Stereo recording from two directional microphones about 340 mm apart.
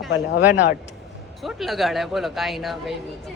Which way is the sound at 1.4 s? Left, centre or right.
Centre.